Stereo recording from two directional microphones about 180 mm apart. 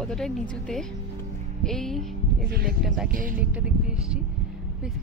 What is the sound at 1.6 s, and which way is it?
Speech, centre (ahead or behind).